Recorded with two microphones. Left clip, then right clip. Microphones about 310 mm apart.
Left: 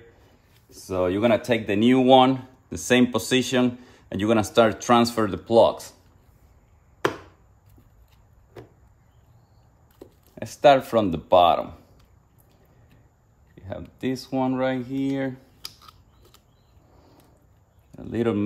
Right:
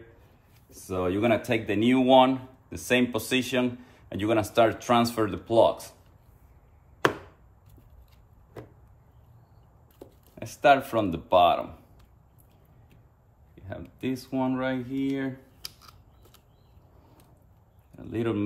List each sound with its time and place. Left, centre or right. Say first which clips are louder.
0.7 s speech: left 5 dB; left
10.3 s speech: left 4 dB; left
13.6 s a sound: left 5 dB; left
13.9 s speech: left 4 dB; left
17.9 s speech: left 5 dB; left